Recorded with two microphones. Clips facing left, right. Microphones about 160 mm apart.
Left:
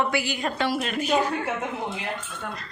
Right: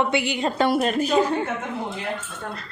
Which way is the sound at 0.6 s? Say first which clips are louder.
Right 7 dB; 40° right (ahead or behind).